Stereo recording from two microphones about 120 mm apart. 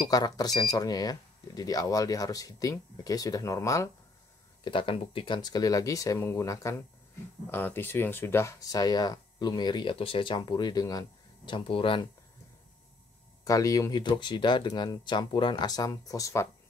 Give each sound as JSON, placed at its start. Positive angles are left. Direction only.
{"t": 0.1, "sound": "speech", "side_deg": 35}
{"t": 4.6, "sound": "speech", "side_deg": 45}
{"t": 13.4, "sound": "speech", "side_deg": 30}